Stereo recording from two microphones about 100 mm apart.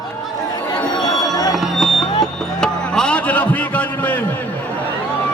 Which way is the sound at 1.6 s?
Centre (ahead or behind).